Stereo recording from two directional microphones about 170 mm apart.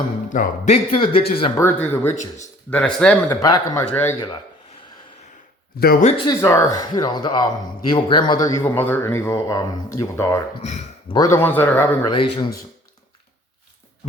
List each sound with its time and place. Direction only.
0.3 s a man's voice: 45° left (ahead or behind)
1.5 s speech: 15° left (ahead or behind)
3.4 s a man's voice: 25° left (ahead or behind)
5.8 s speech: 65° left (ahead or behind)
6.2 s a man's voice: 15° left (ahead or behind)
12.0 s a man's voice: 25° left (ahead or behind)